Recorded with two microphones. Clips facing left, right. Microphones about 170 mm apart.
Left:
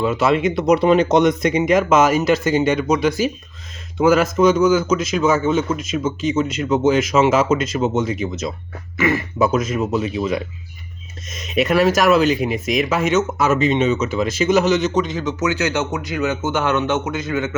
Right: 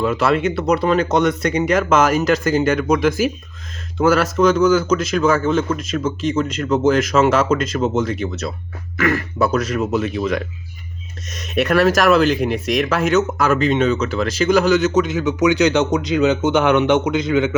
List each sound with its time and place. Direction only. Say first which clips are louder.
0.0 s a man's voice: even; 10° left (ahead or behind)
1.5 s speech: even; 5° left (ahead or behind)
3.9 s a man's voice: left 1 dB; 10° left (ahead or behind)
11.7 s speech: right 1 dB; 5° left (ahead or behind); by 17.5 s 15° right (ahead or behind)